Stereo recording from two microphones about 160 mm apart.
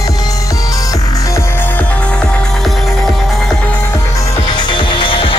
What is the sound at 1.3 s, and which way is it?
Music, 10° left (ahead or behind).